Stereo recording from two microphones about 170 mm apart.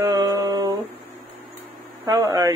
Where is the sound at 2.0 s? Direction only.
25° right (ahead or behind).